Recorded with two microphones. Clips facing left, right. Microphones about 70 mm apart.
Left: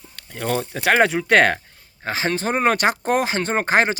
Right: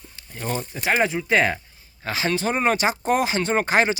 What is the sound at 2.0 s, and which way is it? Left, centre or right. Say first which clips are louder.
Speech: left 1 dB; left.